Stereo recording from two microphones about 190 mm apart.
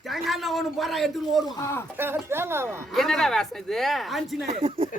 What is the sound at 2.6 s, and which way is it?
Speech, centre (ahead or behind).